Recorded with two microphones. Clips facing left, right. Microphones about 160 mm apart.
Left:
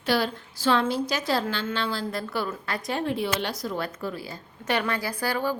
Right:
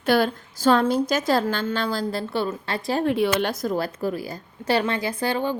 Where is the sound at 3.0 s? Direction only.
60° right (ahead or behind).